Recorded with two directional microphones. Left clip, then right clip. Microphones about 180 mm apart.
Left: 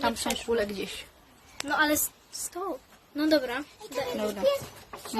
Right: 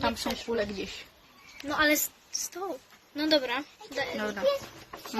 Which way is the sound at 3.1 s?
25° left (ahead or behind).